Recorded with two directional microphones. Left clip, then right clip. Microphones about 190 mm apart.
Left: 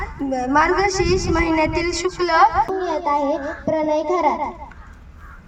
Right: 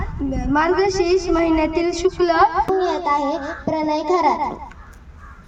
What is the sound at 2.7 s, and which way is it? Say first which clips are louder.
A child's voice: right 2 dB; 40° right (ahead or behind).